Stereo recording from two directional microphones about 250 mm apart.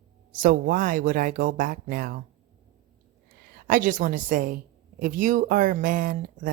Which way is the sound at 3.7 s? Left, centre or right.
Right.